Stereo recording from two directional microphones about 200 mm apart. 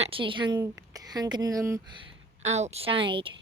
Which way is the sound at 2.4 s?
35° right (ahead or behind).